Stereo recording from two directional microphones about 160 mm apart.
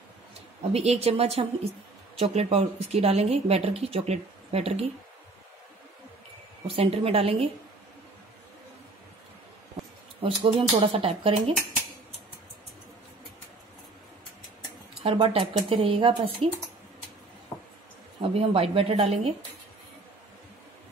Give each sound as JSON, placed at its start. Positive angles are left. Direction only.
{"t": 0.7, "sound": "a woman's voice", "side_deg": -40}
{"t": 6.7, "sound": "a woman's voice", "side_deg": -40}
{"t": 10.2, "sound": "a woman's voice", "side_deg": -35}
{"t": 15.0, "sound": "a woman's voice", "side_deg": -35}
{"t": 18.2, "sound": "a woman's voice", "side_deg": -35}